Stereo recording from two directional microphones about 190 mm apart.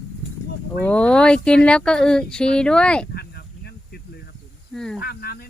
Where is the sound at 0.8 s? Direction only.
5° left (ahead or behind).